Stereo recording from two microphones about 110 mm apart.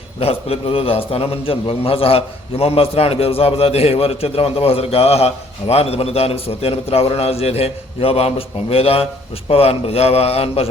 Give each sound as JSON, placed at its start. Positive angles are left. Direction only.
{"t": 0.2, "sound": "a man's voice", "side_deg": 65}